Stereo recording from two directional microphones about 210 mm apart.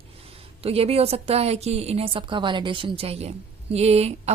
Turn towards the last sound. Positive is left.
turn(degrees=-30)  # may be behind; listen again after turning